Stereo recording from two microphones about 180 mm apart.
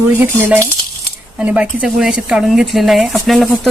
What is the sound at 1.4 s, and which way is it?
Speech, 5° right (ahead or behind).